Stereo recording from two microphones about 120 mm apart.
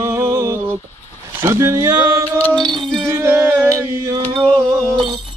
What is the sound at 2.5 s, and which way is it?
Music, 40° right (ahead or behind).